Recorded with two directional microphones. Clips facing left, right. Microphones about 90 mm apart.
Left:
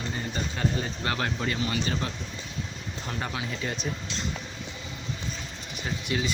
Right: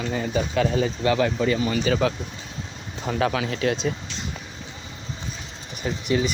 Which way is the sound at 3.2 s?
80° right.